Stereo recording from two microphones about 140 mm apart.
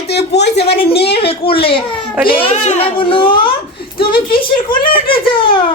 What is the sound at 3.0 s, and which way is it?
A child's voice, 40° left (ahead or behind).